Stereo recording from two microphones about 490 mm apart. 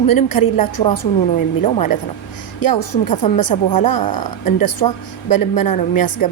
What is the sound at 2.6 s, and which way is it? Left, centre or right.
A woman's voice, left.